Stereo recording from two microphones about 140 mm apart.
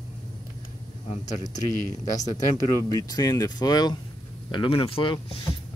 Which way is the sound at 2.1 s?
25° left (ahead or behind).